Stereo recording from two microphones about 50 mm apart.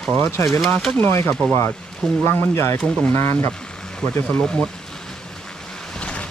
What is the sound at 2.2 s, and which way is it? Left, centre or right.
Speech, left.